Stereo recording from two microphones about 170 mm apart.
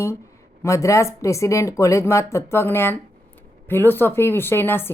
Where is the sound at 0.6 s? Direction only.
15° left (ahead or behind).